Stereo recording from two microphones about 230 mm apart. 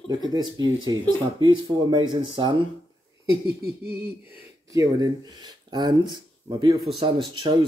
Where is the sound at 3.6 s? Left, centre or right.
Right.